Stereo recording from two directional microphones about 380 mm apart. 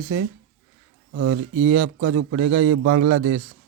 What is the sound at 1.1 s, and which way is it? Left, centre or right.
A man's voice, right.